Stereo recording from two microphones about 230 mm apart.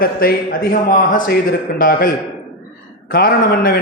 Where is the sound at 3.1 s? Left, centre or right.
Left.